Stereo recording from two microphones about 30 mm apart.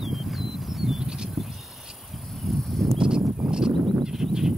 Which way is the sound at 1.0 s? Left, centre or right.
Right.